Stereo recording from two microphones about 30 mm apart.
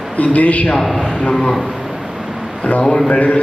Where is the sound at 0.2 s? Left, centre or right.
Left.